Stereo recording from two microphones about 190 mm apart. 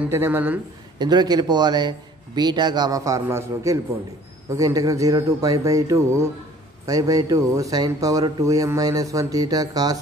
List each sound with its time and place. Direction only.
0.1 s speech: 10° right (ahead or behind)
0.9 s a man's voice: 20° right (ahead or behind)